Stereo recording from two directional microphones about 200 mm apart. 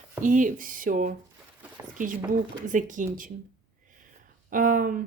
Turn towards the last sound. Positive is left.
turn(degrees=-45)  # may be behind; listen again after turning